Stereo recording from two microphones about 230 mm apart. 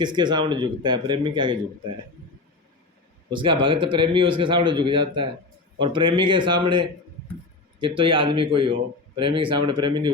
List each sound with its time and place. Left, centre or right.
0.0 s a man's voice: centre
3.2 s a man's voice: right